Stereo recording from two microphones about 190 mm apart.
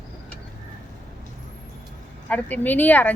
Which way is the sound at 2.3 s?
10° left (ahead or behind).